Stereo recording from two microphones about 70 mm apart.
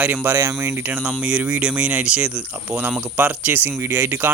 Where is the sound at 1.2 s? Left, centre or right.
Centre.